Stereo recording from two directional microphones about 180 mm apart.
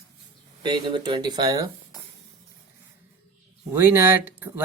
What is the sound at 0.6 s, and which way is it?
Speech, 25° right (ahead or behind).